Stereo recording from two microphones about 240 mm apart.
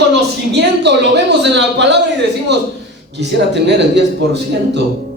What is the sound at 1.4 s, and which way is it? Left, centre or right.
Speech, right.